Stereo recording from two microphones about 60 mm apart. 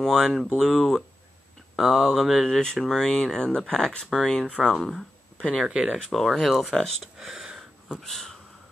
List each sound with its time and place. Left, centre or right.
0.0 s speech: centre
1.8 s speech: centre
5.7 s speech: centre
6.0 s speech: centre
7.2 s a sound: centre
8.0 s speech: centre